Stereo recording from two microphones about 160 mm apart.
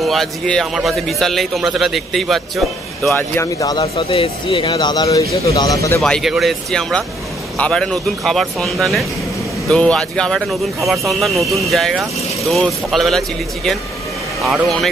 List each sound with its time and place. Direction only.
0.0 s speech: centre (ahead or behind)
3.3 s speech: 20° left (ahead or behind)
3.8 s speech: 40° left (ahead or behind); by 5.9 s 20° left (ahead or behind)
5.9 s speech: 5° left (ahead or behind)
14.4 s speech: centre (ahead or behind)